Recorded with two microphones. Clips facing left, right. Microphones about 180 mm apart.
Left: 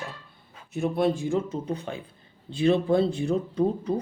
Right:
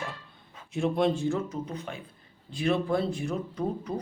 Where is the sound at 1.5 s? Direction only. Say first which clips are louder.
Left 4 dB; 35° left (ahead or behind).